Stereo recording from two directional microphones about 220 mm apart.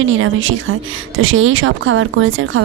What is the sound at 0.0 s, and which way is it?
Speech, 60° right (ahead or behind).